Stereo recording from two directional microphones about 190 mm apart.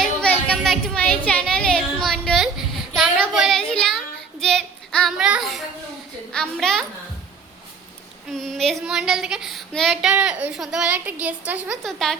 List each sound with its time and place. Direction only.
0.0 s a sound: 5° left (ahead or behind)
3.2 s child singing: centre (ahead or behind)
6.3 s a child's voice: 5° left (ahead or behind)
8.3 s speech: centre (ahead or behind)